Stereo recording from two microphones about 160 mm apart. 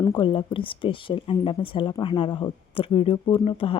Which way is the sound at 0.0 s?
25° left (ahead or behind).